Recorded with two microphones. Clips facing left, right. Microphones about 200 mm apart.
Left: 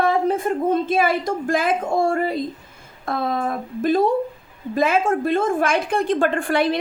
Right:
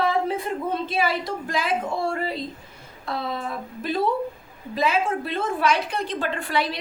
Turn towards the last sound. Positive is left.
turn(degrees=50)  # may be behind; listen again after turning